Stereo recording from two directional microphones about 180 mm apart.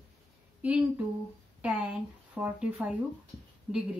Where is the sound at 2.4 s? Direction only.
5° right (ahead or behind).